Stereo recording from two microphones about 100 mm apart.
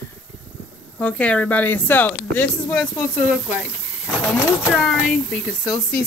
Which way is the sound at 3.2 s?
10° right (ahead or behind).